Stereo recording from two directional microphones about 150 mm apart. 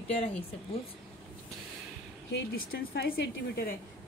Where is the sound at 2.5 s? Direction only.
85° left.